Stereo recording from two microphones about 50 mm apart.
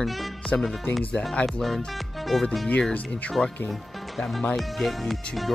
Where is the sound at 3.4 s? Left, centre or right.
Centre.